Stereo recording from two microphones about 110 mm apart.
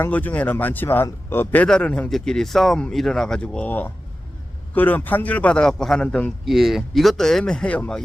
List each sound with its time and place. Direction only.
0.0 s speech: 15° left (ahead or behind)
1.6 s speech: 10° left (ahead or behind)
6.4 s speech: centre (ahead or behind)